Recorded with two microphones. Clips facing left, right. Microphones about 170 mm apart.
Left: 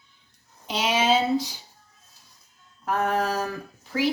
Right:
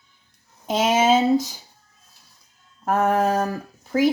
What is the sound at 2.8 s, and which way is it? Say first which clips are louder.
Speech: right 5 dB; 45° right (ahead or behind).